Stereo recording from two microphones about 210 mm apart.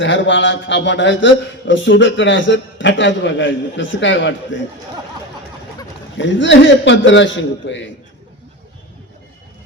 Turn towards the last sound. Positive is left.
turn(degrees=60)  # may be behind; listen again after turning